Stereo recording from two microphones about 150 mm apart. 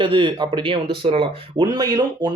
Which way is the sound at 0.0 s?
35° right (ahead or behind).